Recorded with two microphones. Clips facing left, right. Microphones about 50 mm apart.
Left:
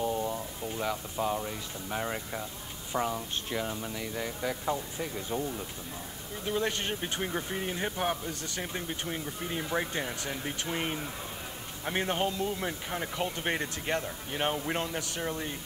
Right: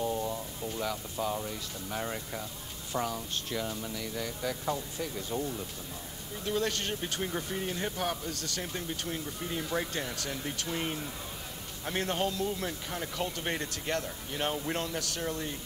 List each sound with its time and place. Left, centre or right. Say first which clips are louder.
0.0 s speech: left 1 dB; centre